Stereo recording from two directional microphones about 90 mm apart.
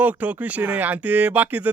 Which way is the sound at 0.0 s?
20° right (ahead or behind).